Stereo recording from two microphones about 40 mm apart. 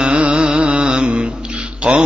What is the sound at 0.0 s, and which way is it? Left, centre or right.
Music, right.